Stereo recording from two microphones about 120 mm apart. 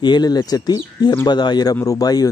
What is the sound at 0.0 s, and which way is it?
Speech, 35° left (ahead or behind).